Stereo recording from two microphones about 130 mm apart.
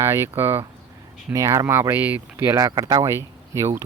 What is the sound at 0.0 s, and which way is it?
Speech, 20° right (ahead or behind).